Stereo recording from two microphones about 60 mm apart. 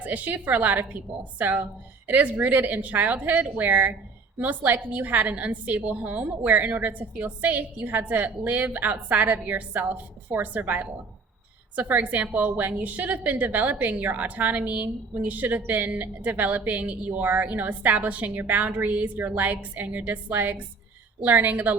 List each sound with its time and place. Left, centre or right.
0.0 s a woman's voice: right